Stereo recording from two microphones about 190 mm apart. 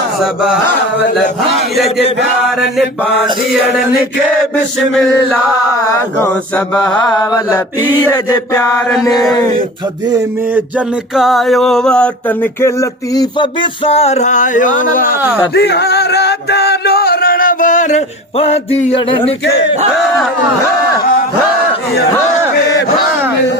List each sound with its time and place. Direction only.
1.7 s mantra: centre (ahead or behind)
4.5 s chant: 5° left (ahead or behind)
6.7 s mantra: 5° left (ahead or behind)
7.2 s chant: 15° left (ahead or behind)
10.5 s a sound: 5° right (ahead or behind); by 15.2 s 50° left (ahead or behind)
15.5 s music: 60° left (ahead or behind); by 19.3 s 30° left (ahead or behind)